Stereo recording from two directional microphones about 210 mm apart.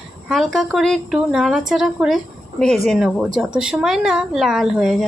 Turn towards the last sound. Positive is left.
turn(degrees=0)  # may be behind; listen again after turning